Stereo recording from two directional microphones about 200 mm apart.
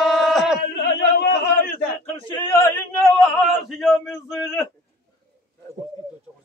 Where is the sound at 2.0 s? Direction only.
20° left (ahead or behind); by 4.4 s centre (ahead or behind).